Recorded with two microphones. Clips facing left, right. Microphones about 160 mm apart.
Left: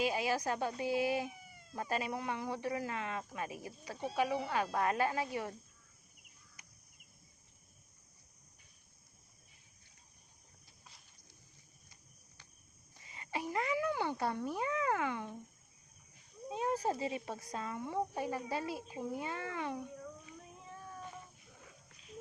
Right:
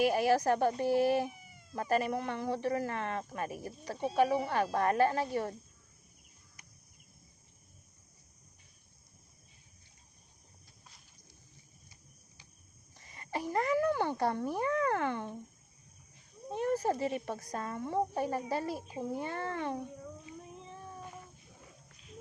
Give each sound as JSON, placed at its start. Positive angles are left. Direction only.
{"t": 0.1, "sound": "speech", "side_deg": -55}
{"t": 1.7, "sound": "speech", "side_deg": -50}
{"t": 13.0, "sound": "speech", "side_deg": -45}
{"t": 16.5, "sound": "speech", "side_deg": -60}
{"t": 17.4, "sound": "speech", "side_deg": -45}
{"t": 19.2, "sound": "speech", "side_deg": -50}
{"t": 20.0, "sound": "cat", "side_deg": -25}